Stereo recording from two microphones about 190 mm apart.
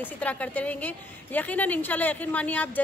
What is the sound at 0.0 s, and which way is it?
A woman's voice, 10° left (ahead or behind).